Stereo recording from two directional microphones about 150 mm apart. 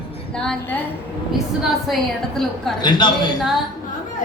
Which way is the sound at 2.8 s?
30° left (ahead or behind).